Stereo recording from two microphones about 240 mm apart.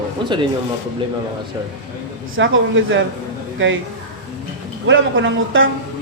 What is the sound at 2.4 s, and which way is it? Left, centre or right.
A man's voice, right.